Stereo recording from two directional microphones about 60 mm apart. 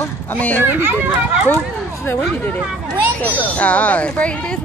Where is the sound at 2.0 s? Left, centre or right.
Left.